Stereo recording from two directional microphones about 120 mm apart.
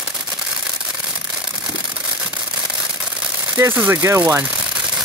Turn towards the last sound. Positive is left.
turn(degrees=-20)  # may be behind; listen again after turning